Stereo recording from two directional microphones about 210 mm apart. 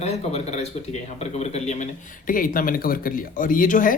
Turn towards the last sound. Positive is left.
turn(degrees=40)  # may be behind; listen again after turning